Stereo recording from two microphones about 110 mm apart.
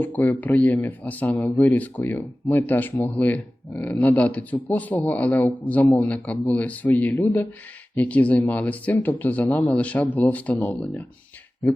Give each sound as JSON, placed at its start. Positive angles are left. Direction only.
{"t": 0.0, "sound": "speech", "side_deg": 15}